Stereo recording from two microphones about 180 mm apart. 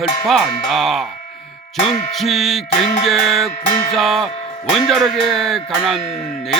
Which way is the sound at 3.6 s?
50° left (ahead or behind).